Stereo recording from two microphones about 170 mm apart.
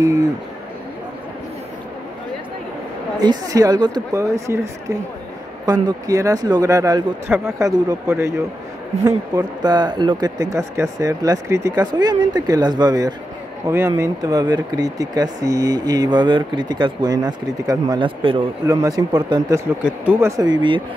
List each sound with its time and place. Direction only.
3.2 s speech: 20° right (ahead or behind)
19.8 s speech: 15° right (ahead or behind)